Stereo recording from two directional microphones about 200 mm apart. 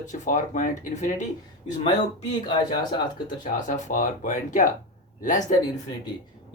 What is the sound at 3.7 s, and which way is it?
Speech, 40° left (ahead or behind).